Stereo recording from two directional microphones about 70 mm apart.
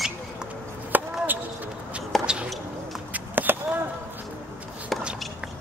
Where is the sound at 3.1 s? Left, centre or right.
Right.